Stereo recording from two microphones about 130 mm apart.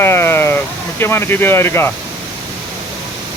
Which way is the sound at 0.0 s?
20° left (ahead or behind).